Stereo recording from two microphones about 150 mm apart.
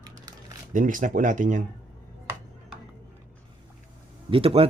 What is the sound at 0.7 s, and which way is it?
Speech, 60° right (ahead or behind).